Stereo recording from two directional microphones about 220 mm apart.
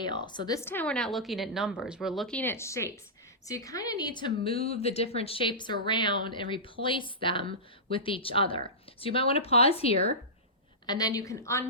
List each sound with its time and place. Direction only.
0.0 s a woman's voice: 20° left (ahead or behind)